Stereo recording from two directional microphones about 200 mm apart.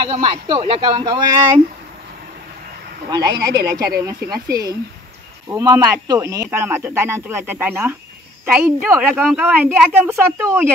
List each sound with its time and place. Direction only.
0.0 s speech: 25° right (ahead or behind)
3.1 s speech: 20° right (ahead or behind)